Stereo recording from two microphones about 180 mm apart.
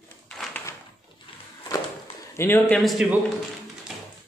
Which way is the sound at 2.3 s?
10° left (ahead or behind).